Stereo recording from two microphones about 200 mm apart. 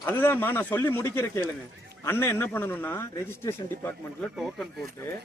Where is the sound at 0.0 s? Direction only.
10° left (ahead or behind).